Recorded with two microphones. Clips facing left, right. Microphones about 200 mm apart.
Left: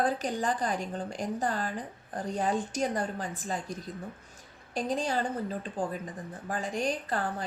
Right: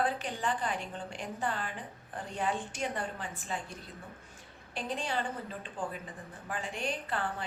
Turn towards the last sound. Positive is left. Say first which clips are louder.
# left 3 dB
turn(degrees=40)  # may be behind; listen again after turning